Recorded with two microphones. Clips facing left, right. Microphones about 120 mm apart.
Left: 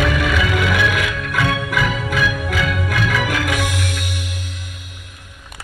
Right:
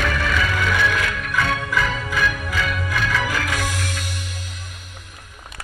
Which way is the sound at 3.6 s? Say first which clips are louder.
Left 3 dB; 65° left (ahead or behind).